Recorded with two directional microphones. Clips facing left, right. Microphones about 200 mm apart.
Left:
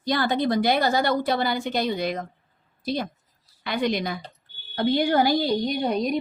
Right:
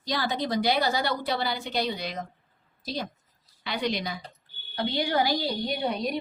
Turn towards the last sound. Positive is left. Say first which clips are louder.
# left 5 dB
turn(degrees=45)  # may be behind; listen again after turning